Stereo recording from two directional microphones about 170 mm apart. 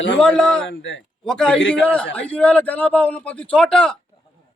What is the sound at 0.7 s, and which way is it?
Speech, 90° left.